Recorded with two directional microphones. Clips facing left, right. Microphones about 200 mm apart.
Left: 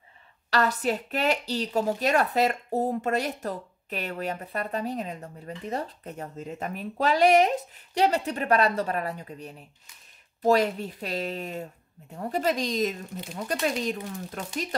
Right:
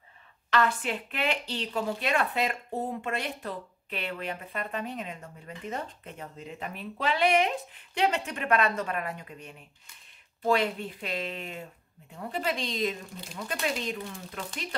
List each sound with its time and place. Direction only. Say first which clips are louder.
0.5 s a woman's voice: left 2 dB; 40° left (ahead or behind)